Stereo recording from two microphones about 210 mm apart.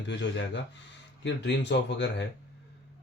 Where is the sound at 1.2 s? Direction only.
55° left (ahead or behind).